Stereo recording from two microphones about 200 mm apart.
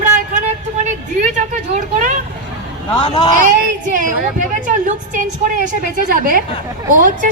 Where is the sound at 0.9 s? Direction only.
35° right (ahead or behind).